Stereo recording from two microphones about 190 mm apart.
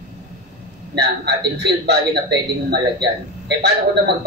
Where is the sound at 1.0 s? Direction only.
65° right (ahead or behind).